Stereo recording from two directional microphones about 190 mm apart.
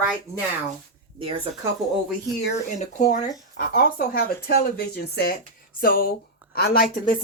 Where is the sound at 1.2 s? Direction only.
25° right (ahead or behind).